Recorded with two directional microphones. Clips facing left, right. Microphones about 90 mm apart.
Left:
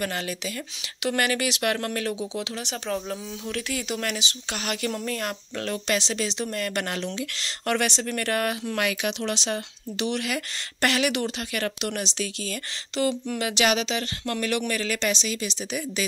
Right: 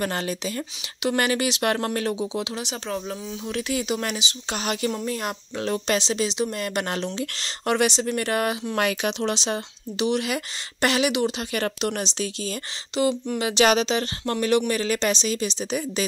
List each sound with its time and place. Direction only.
0.0 s speech: 35° right (ahead or behind)
2.6 s speech: 5° right (ahead or behind)
3.4 s speech: 20° right (ahead or behind)
7.6 s speech: 15° right (ahead or behind)
8.7 s speech: 30° right (ahead or behind); by 11.4 s 15° right (ahead or behind)
11.5 s speech: 30° right (ahead or behind)